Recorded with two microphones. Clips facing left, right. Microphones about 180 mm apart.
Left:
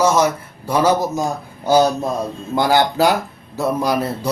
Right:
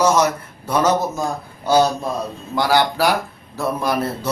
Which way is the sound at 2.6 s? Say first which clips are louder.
Left 2 dB; 20° left (ahead or behind).